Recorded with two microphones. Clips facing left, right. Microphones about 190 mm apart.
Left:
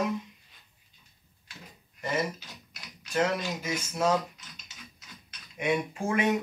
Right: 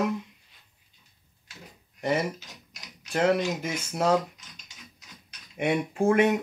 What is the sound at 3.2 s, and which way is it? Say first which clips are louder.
Speech: right 6 dB; 55° right (ahead or behind).